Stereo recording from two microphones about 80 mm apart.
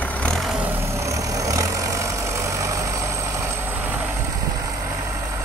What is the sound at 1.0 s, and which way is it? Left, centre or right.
Vehicle, right.